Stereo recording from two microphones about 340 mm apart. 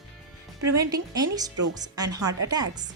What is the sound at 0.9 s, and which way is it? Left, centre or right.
A woman's voice, centre.